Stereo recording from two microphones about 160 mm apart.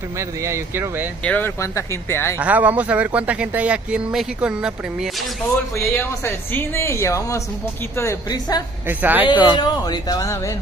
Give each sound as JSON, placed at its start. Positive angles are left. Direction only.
{"t": 0.2, "sound": "speech", "side_deg": -15}
{"t": 1.2, "sound": "speech", "side_deg": 10}
{"t": 2.3, "sound": "speech", "side_deg": -10}
{"t": 5.8, "sound": "speech", "side_deg": 15}
{"t": 8.8, "sound": "speech", "side_deg": -10}
{"t": 9.5, "sound": "speech", "side_deg": 25}